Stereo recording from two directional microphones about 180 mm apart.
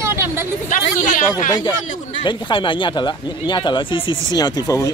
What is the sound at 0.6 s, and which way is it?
Speech, 45° left (ahead or behind).